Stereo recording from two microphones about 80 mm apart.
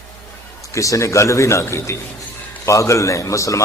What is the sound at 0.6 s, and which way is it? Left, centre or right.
A man's voice, left.